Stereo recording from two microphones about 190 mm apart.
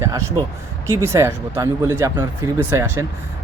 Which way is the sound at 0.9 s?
15° right (ahead or behind).